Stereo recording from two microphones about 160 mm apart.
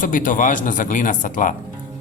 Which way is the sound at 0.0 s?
55° left (ahead or behind).